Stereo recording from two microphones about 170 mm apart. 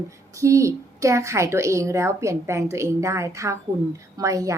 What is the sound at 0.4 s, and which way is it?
A woman's voice, 15° right (ahead or behind).